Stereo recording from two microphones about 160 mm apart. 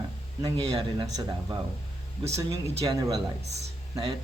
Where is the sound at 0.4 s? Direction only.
25° right (ahead or behind).